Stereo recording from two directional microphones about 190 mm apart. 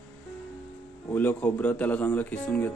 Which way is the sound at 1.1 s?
10° left (ahead or behind).